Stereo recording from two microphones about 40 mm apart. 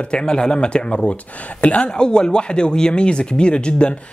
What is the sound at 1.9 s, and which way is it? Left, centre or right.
Speech, centre.